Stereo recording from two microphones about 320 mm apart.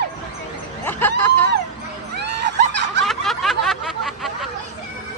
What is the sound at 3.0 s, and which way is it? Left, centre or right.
Snicker, centre.